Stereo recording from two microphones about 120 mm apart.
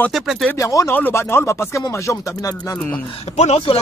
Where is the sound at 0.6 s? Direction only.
25° left (ahead or behind).